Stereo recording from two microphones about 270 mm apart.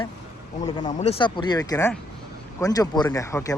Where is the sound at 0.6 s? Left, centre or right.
Centre.